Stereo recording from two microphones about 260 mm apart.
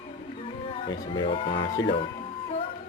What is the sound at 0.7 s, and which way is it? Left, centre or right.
Speech, left.